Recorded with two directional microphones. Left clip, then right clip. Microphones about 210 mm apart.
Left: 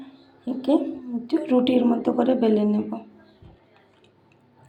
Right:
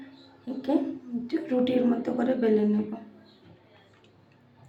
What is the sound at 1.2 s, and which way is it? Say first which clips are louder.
A woman's voice: left 6 dB; 20° left (ahead or behind).